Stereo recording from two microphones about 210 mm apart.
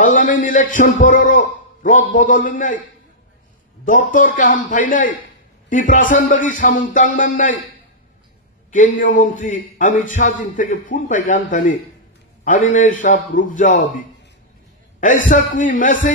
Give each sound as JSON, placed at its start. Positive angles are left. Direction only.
{"t": 0.0, "sound": "a man's voice", "side_deg": 40}
{"t": 3.8, "sound": "a man's voice", "side_deg": 40}
{"t": 8.7, "sound": "a man's voice", "side_deg": 40}
{"t": 15.3, "sound": "a man's voice", "side_deg": 40}